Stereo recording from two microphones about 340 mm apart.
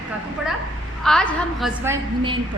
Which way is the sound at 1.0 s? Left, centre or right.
Centre.